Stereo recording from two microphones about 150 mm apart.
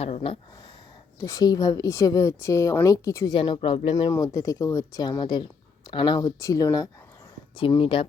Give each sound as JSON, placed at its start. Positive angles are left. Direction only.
{"t": 0.0, "sound": "speech", "side_deg": 40}
{"t": 1.2, "sound": "a woman's voice", "side_deg": 25}
{"t": 3.3, "sound": "speech", "side_deg": 30}
{"t": 3.9, "sound": "a woman's voice", "side_deg": 20}
{"t": 7.5, "sound": "speech", "side_deg": 35}